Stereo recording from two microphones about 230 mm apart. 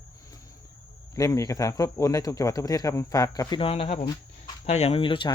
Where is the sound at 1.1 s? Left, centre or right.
Centre.